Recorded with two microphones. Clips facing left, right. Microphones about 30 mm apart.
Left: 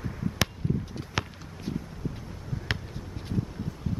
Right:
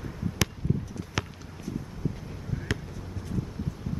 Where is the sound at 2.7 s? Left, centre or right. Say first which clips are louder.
Left 1 dB; left.